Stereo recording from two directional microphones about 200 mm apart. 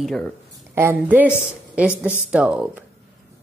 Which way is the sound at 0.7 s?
10° right (ahead or behind).